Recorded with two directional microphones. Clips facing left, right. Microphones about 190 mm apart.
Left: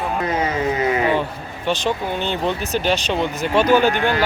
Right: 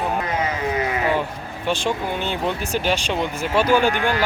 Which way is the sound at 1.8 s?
10° right (ahead or behind).